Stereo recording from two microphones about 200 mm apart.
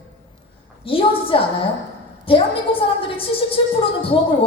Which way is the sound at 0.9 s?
25° left (ahead or behind).